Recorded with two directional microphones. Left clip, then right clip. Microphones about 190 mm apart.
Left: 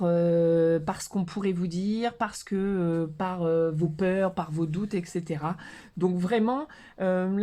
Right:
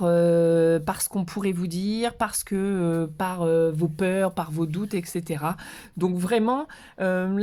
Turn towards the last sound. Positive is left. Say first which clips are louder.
# right 2 dB
turn(degrees=-35)  # may be behind; listen again after turning